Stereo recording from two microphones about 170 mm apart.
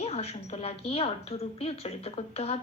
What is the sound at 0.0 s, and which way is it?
A woman's voice, 35° left (ahead or behind).